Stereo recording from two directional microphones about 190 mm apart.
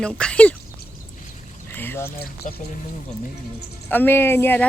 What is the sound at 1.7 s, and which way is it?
Boat, 10° left (ahead or behind).